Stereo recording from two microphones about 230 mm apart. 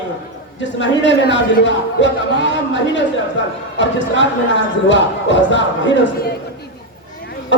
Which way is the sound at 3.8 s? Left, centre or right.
Left.